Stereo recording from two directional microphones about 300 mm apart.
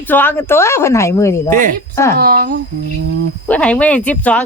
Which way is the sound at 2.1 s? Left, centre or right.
Right.